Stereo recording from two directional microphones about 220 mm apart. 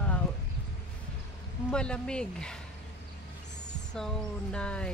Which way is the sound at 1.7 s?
5° left (ahead or behind).